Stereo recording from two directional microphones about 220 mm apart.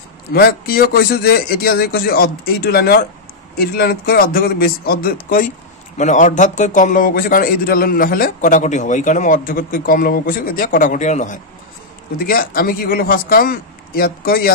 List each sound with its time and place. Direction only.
0.3 s a man's voice: 45° left (ahead or behind)